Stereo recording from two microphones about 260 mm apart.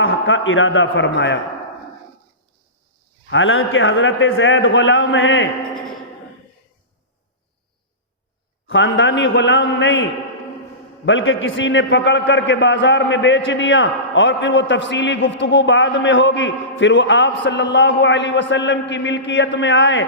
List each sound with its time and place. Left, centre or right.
0.0 s a man's voice: left
3.2 s a man's voice: left
8.6 s a man's voice: left